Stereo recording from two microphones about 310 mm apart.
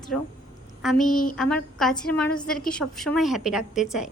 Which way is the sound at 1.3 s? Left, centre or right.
Centre.